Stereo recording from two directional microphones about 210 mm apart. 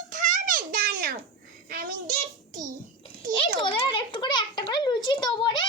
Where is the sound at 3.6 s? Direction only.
25° left (ahead or behind).